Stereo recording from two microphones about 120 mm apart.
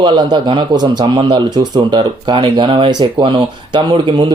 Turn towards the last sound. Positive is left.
turn(degrees=-40)  # may be behind; listen again after turning